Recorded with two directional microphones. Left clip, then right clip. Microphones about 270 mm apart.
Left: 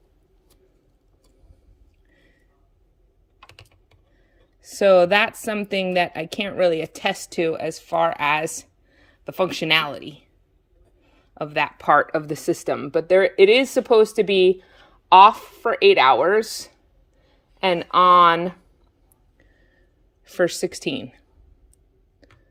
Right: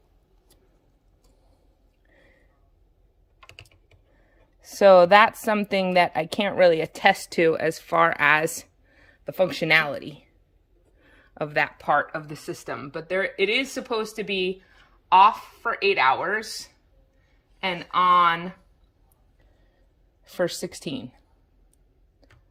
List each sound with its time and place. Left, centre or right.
4.6 s a woman's voice: centre
11.0 s a sound: centre
11.9 s speech: left
20.2 s a woman's voice: centre